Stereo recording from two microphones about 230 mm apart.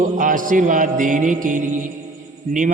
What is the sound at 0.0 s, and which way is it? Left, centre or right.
A man's voice, right.